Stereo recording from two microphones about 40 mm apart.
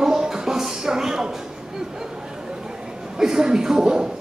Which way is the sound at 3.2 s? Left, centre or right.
Centre.